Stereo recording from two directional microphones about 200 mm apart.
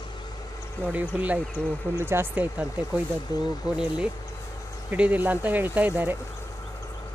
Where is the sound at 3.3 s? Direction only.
20° left (ahead or behind).